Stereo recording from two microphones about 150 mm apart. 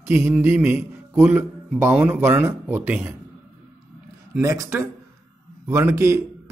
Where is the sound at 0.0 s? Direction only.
15° right (ahead or behind).